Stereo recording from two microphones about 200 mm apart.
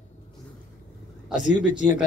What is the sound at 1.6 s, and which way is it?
Speech, 40° left (ahead or behind).